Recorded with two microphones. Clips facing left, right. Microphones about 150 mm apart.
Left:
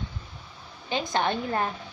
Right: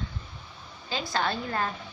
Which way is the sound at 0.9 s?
20° left (ahead or behind).